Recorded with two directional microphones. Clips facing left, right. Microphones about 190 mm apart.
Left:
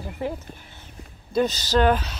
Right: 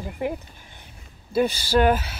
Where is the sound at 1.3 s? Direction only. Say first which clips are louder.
Right 1 dB; 10° right (ahead or behind).